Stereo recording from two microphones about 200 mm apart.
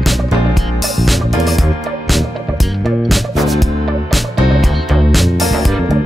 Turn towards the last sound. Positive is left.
turn(degrees=0)  # may be behind; listen again after turning